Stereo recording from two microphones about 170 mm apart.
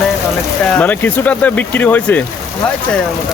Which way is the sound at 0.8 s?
10° left (ahead or behind).